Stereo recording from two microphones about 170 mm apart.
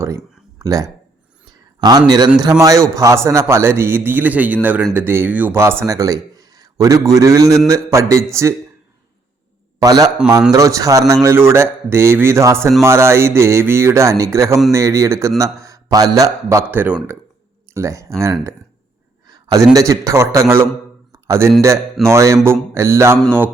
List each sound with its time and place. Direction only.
0.6 s a man's voice: 20° right (ahead or behind)
9.8 s a man's voice: 20° right (ahead or behind)
19.3 s a man's voice: 20° right (ahead or behind)
21.1 s a sound: 15° right (ahead or behind)
22.0 s speech: 15° right (ahead or behind)
23.1 s a sound: 5° left (ahead or behind)